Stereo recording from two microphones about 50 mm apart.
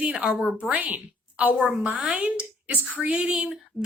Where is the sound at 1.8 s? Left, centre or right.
Right.